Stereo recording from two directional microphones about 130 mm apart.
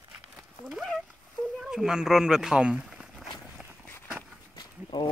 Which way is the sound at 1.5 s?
5° right (ahead or behind).